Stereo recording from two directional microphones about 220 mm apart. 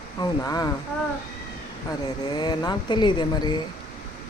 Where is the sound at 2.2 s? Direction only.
20° left (ahead or behind).